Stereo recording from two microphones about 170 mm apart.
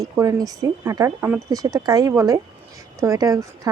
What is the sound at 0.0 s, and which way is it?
Speech, 20° right (ahead or behind).